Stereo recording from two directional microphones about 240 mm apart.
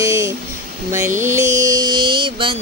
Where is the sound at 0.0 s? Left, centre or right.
Centre.